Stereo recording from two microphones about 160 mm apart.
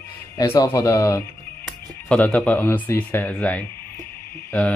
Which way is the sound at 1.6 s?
5° left (ahead or behind).